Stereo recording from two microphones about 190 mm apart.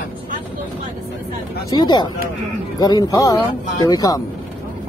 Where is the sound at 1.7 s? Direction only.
20° left (ahead or behind).